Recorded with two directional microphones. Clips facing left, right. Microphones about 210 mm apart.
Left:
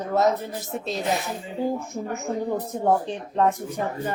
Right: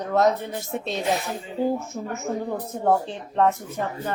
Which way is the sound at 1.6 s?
15° left (ahead or behind).